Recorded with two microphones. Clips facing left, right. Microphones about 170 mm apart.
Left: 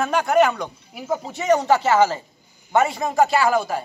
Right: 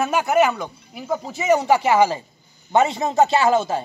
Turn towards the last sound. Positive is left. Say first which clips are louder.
# right 2 dB
turn(degrees=-25)  # may be behind; listen again after turning